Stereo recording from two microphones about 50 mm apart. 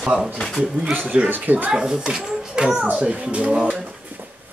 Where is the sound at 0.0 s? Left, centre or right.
Centre.